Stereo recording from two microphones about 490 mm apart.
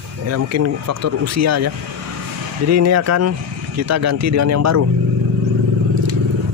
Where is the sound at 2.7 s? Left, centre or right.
Right.